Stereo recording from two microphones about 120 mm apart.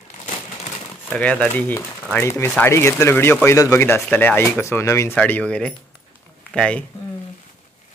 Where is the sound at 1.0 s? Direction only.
5° left (ahead or behind).